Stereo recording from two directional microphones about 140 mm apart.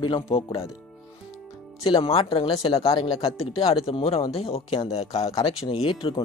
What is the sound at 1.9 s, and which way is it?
Speech, 40° left (ahead or behind).